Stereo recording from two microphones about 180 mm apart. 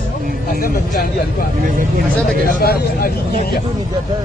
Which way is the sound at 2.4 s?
55° left (ahead or behind).